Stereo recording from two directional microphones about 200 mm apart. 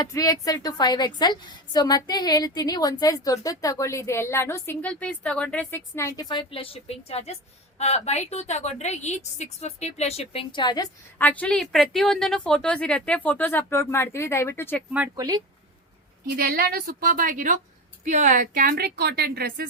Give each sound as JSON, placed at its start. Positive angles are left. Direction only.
{"t": 0.0, "sound": "a woman's voice", "side_deg": 20}
{"t": 11.2, "sound": "speech", "side_deg": 5}
{"t": 15.1, "sound": "speech", "side_deg": -20}
{"t": 16.4, "sound": "speech", "side_deg": -50}